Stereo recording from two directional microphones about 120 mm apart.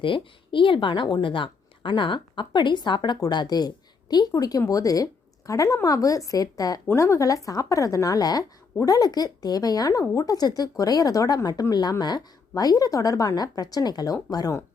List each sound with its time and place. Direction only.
0.0 s speech: 45° left (ahead or behind)